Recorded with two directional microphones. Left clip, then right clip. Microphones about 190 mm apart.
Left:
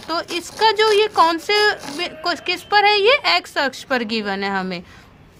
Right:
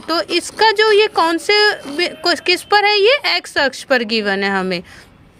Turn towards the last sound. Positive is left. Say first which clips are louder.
# right 5 dB
turn(degrees=-35)  # may be behind; listen again after turning